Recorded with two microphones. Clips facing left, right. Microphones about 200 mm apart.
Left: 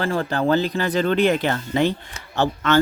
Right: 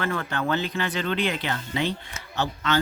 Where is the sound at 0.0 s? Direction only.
30° left (ahead or behind).